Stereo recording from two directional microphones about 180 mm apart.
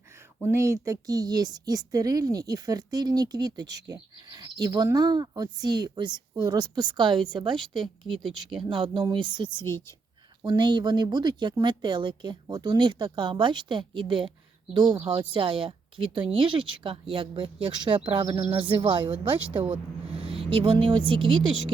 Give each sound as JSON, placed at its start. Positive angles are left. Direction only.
{"t": 0.4, "sound": "a woman's voice", "side_deg": -15}
{"t": 8.1, "sound": "speech", "side_deg": 0}
{"t": 8.6, "sound": "a woman's voice", "side_deg": -25}
{"t": 9.6, "sound": "a woman's voice", "side_deg": 15}
{"t": 10.4, "sound": "a woman's voice", "side_deg": -25}
{"t": 14.3, "sound": "a sound", "side_deg": -25}
{"t": 15.0, "sound": "a woman's voice", "side_deg": -25}
{"t": 20.2, "sound": "a woman's voice", "side_deg": -30}